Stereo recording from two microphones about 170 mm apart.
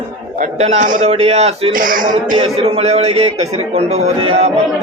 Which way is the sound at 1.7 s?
55° right (ahead or behind).